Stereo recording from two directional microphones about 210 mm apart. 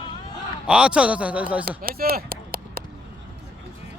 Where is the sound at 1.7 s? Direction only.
45° right (ahead or behind).